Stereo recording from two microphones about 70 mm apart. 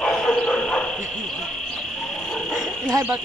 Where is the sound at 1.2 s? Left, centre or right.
Centre.